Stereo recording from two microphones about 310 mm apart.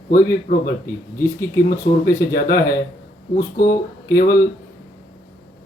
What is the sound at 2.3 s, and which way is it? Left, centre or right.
Speech, left.